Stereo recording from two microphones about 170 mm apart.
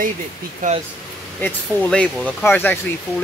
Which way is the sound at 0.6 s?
50° right (ahead or behind).